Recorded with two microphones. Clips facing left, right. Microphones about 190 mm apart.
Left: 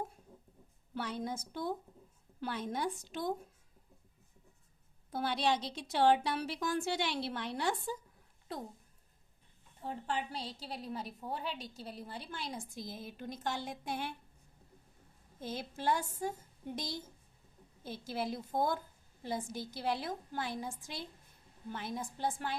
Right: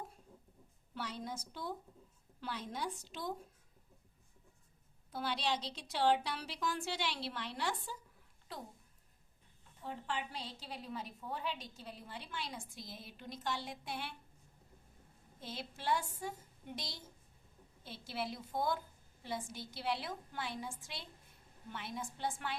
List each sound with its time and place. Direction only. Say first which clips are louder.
0.9 s a woman's voice: left 5 dB; 55° left (ahead or behind)
5.1 s a woman's voice: left 5 dB; 50° left (ahead or behind)
9.8 s a woman's voice: left 4 dB; 40° left (ahead or behind)
15.4 s a woman's voice: left 6 dB; 45° left (ahead or behind)